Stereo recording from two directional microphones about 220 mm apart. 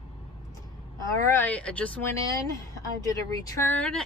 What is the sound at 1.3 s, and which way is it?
Speech, 10° left (ahead or behind).